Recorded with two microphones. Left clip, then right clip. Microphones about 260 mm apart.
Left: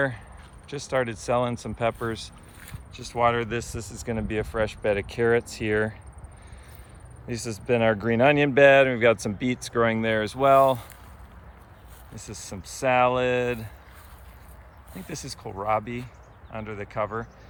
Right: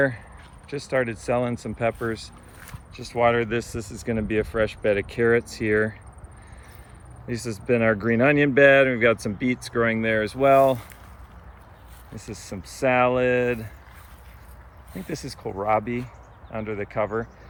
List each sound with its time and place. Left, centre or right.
0.9 s speech: centre
4.8 s speech: left
5.2 s speech: centre
7.3 s speech: centre
12.1 s speech: centre
14.9 s speech: centre